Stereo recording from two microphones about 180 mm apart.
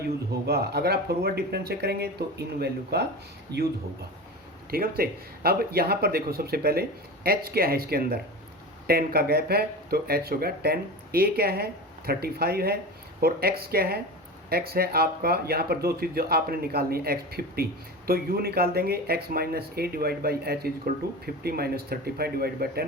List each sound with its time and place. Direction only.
0.0 s speech: 60° right (ahead or behind)
3.5 s speech: 20° right (ahead or behind)
4.7 s speech: 55° right (ahead or behind)